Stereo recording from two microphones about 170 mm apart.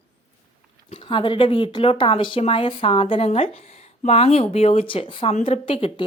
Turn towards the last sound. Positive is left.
turn(degrees=35)  # may be behind; listen again after turning